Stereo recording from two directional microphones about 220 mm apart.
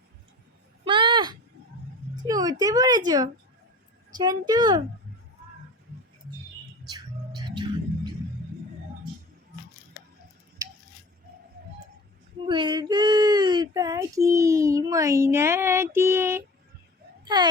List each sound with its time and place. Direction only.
0.9 s a sound: 20° right (ahead or behind)
2.2 s speech: 15° right (ahead or behind)
4.2 s speech: 15° right (ahead or behind)
6.9 s music: 20° right (ahead or behind)
12.5 s speech: 20° right (ahead or behind)